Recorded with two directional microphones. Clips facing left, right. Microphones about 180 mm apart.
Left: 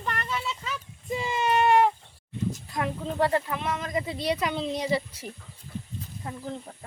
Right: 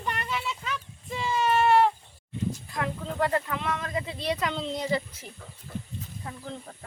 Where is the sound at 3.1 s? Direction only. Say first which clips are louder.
Left 2 dB; 25° left (ahead or behind); by 5.3 s 10° left (ahead or behind).